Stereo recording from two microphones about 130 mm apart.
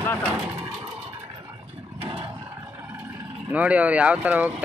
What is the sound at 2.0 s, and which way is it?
Roar, 45° right (ahead or behind).